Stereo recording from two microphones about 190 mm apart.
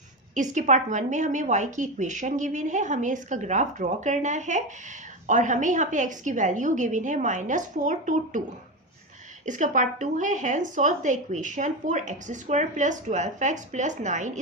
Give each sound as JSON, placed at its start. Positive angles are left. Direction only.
{"t": 0.3, "sound": "speech", "side_deg": -40}
{"t": 9.5, "sound": "speech", "side_deg": -40}